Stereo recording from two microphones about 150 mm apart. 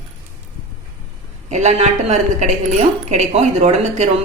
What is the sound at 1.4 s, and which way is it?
Speech, 50° right (ahead or behind).